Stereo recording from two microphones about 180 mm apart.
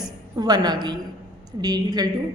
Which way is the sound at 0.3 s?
20° right (ahead or behind).